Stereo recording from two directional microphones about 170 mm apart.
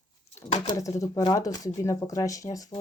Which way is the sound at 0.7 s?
20° left (ahead or behind).